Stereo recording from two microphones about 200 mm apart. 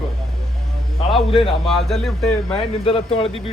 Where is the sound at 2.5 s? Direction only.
30° left (ahead or behind).